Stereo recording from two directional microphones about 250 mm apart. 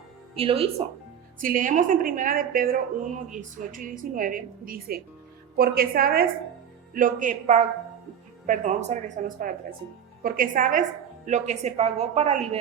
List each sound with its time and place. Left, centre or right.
0.3 s a woman's voice: right
1.4 s a woman's voice: right